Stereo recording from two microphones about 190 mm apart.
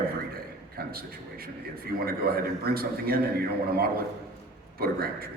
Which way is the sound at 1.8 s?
55° right (ahead or behind).